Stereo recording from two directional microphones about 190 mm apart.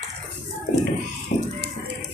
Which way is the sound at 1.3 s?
40° left (ahead or behind).